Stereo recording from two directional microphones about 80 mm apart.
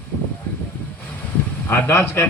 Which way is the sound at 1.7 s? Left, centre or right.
Left.